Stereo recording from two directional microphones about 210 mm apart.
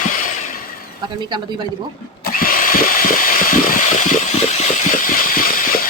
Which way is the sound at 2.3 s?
40° left (ahead or behind).